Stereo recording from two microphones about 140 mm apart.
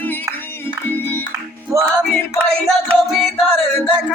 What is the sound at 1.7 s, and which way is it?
Music, 20° right (ahead or behind).